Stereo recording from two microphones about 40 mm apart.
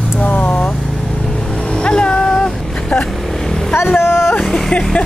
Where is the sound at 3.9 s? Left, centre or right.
Left.